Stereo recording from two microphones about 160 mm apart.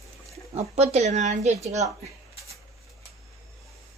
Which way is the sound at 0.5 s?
45° right (ahead or behind).